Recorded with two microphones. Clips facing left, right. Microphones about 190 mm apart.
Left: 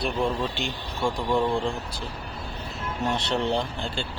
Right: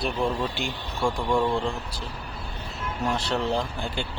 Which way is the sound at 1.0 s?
5° left (ahead or behind).